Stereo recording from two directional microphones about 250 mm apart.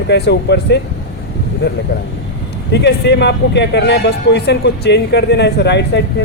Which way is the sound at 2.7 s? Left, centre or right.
Left.